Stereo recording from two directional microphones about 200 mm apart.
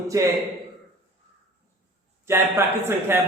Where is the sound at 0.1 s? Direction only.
15° right (ahead or behind).